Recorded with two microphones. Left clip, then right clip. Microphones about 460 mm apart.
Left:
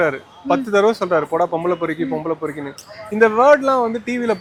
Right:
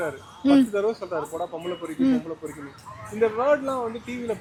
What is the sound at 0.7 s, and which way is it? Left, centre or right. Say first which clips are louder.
Speech: left 10 dB; left.